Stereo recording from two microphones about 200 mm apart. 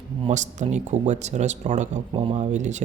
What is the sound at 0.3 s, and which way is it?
Speech, 35° right (ahead or behind).